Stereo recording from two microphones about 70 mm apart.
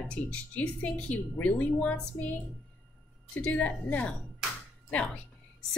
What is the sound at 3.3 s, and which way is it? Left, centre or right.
Speech, centre.